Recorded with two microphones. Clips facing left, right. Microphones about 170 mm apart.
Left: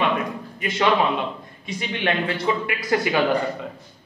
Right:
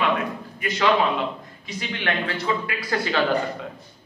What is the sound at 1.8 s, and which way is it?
Speech, 20° left (ahead or behind).